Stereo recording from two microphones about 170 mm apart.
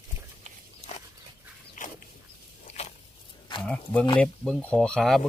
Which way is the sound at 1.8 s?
50° left (ahead or behind).